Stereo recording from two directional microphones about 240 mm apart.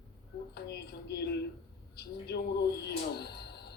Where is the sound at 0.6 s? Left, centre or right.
Left.